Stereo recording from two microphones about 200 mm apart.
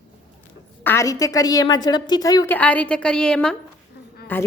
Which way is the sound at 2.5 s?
5° left (ahead or behind).